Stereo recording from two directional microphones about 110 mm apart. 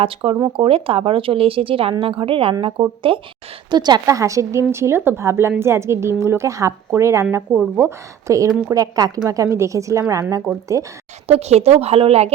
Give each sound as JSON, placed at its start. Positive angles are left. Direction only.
{"t": 0.0, "sound": "speech", "side_deg": -55}
{"t": 3.7, "sound": "a woman's voice", "side_deg": -40}
{"t": 11.3, "sound": "speech", "side_deg": -75}